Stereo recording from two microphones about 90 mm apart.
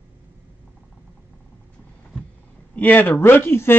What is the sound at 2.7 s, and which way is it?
Speech, 20° left (ahead or behind).